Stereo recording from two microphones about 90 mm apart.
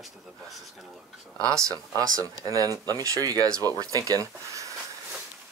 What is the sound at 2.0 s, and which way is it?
Speech, 40° right (ahead or behind).